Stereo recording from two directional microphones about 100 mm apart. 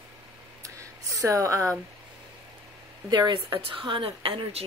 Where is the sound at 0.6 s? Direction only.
35° right (ahead or behind).